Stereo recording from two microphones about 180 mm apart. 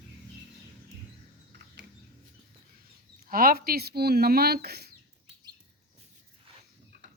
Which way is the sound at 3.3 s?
55° right (ahead or behind).